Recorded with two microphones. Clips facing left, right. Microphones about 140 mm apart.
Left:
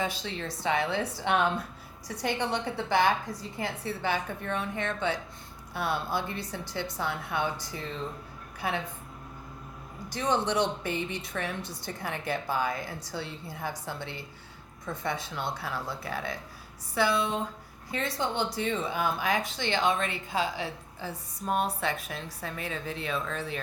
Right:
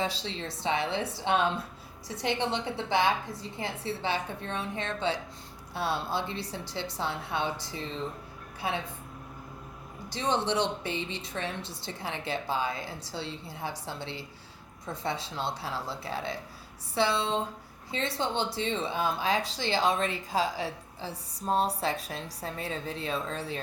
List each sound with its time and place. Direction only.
0.0 s a woman's voice: 30° right (ahead or behind)
10.1 s a woman's voice: 25° right (ahead or behind)